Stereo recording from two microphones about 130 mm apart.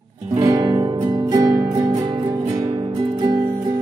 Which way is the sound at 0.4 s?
30° right (ahead or behind).